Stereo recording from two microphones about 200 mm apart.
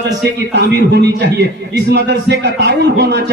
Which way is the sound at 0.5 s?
55° right (ahead or behind).